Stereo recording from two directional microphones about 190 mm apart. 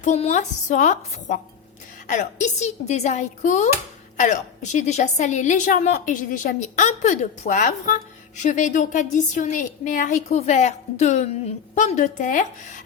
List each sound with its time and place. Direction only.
0.0 s a woman's voice: 35° left (ahead or behind)